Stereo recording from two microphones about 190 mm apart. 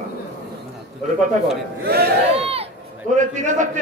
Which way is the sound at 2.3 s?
30° right (ahead or behind).